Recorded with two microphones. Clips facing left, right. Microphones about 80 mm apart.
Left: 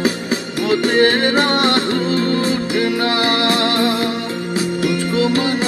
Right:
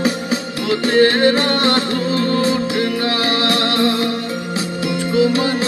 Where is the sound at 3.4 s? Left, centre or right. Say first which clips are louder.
Even; left.